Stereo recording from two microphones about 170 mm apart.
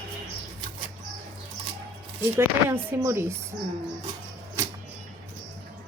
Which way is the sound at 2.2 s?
15° right (ahead or behind).